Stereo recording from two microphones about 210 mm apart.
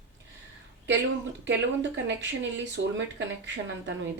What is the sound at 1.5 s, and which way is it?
Speech, 60° right (ahead or behind).